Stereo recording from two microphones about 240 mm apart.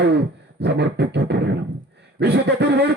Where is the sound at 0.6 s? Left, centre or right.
Right.